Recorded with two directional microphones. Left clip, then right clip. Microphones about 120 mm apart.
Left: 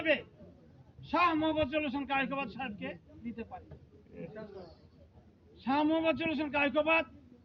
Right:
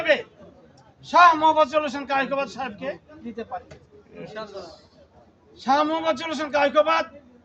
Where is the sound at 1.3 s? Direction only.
45° right (ahead or behind).